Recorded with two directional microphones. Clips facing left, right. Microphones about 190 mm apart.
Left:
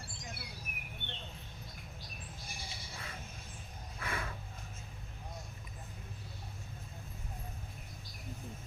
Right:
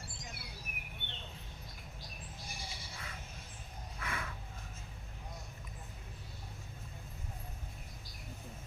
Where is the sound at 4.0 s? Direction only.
35° left (ahead or behind).